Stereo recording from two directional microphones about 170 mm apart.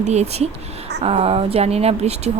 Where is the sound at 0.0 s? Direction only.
40° right (ahead or behind).